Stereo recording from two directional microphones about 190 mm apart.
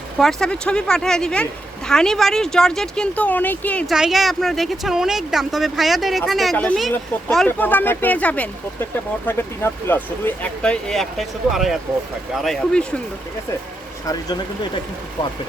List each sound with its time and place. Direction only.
0.2 s speech: centre (ahead or behind)
14.1 s speech: 20° left (ahead or behind)